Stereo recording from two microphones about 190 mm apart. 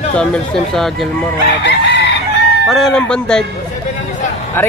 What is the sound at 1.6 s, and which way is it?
Chicken, 65° left (ahead or behind).